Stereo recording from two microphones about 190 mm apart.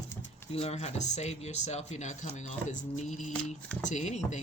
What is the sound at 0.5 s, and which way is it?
Speech, 35° left (ahead or behind).